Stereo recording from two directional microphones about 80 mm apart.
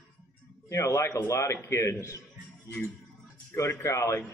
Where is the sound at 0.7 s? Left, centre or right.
Left.